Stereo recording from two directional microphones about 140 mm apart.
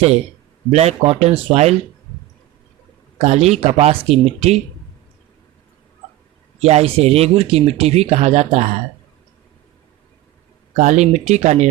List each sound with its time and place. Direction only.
0.7 s speech: 50° right (ahead or behind)
3.2 s speech: 50° right (ahead or behind)
6.6 s speech: 50° right (ahead or behind)
10.8 s speech: 55° right (ahead or behind)